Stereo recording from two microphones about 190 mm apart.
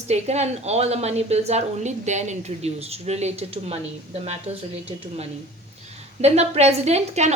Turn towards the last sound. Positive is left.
turn(degrees=-35)  # may be behind; listen again after turning